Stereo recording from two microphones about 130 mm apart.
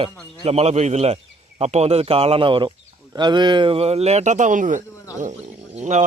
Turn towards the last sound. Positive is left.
turn(degrees=-65)  # may be behind; listen again after turning